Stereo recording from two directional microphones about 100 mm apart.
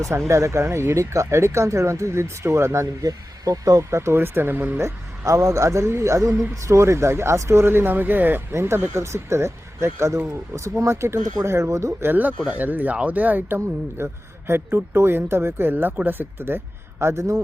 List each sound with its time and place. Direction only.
0.3 s speech: 30° right (ahead or behind)